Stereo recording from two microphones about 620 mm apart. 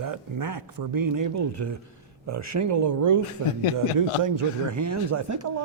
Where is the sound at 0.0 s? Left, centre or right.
Right.